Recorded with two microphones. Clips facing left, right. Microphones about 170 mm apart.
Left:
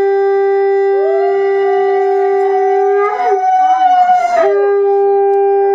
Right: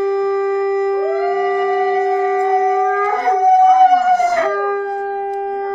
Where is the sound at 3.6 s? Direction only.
65° left (ahead or behind).